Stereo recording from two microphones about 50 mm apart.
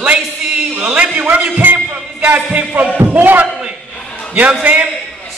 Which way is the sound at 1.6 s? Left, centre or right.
Right.